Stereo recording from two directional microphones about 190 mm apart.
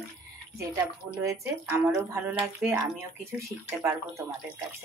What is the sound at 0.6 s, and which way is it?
Speech, 15° right (ahead or behind).